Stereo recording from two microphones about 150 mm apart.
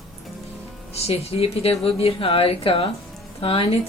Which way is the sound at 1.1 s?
40° left (ahead or behind).